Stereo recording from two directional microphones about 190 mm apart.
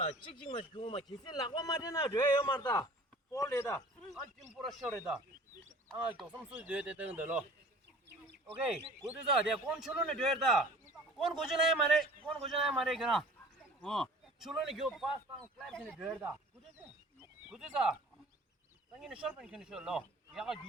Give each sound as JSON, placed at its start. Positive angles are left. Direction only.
{"t": 0.4, "sound": "a man's voice", "side_deg": 30}
{"t": 4.5, "sound": "a man's voice", "side_deg": 0}
{"t": 9.6, "sound": "a man's voice", "side_deg": 0}
{"t": 17.4, "sound": "speech", "side_deg": -5}
{"t": 18.9, "sound": "a man's voice", "side_deg": -5}